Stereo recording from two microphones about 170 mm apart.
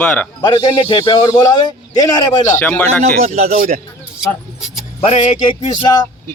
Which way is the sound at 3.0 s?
40° right (ahead or behind).